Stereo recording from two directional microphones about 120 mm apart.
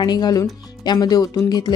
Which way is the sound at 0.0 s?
35° left (ahead or behind).